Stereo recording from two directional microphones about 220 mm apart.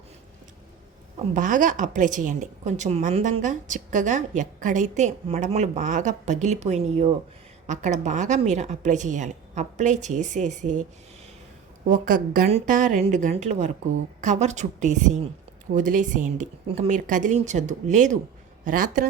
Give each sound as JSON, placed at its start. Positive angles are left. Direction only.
{"t": 1.4, "sound": "a woman's voice", "side_deg": -35}
{"t": 11.9, "sound": "a woman's voice", "side_deg": -35}